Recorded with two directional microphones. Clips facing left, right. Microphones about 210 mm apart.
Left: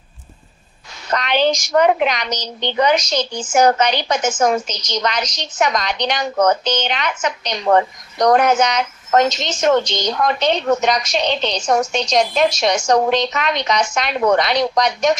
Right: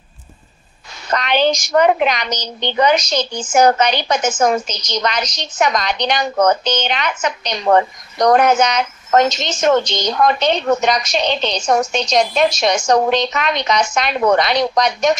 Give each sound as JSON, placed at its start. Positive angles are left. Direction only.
{"t": 1.1, "sound": "a woman's voice", "side_deg": -60}